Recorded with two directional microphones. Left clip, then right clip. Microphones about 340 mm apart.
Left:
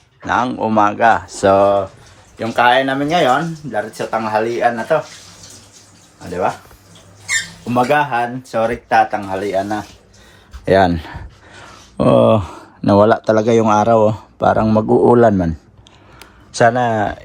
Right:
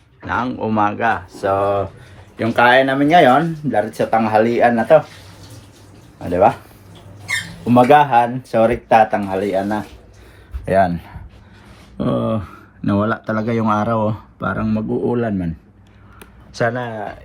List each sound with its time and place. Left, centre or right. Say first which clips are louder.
0.3 s speech: left 4 dB; centre
1.4 s speech: left 6 dB; left
2.4 s speech: right 1 dB; centre
7.7 s speech: right 4 dB; centre
10.7 s a sound: left 3 dB; left
12.0 s speech: left 10 dB; left
12.8 s speech: left 9 dB; centre
14.8 s a man's voice: left 11 dB; left
16.5 s speech: left 7 dB; centre